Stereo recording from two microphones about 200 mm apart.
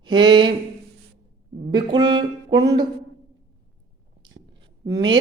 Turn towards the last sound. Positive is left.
turn(degrees=-20)  # may be behind; listen again after turning